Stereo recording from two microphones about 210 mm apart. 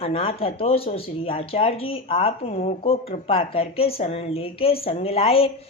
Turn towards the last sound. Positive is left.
turn(degrees=30)  # may be behind; listen again after turning